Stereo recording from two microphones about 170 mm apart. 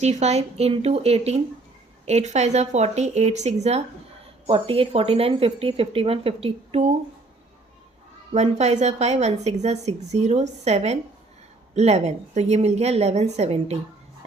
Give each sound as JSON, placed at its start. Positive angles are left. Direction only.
{"t": 0.0, "sound": "a woman's voice", "side_deg": -40}
{"t": 8.3, "sound": "a woman's voice", "side_deg": -40}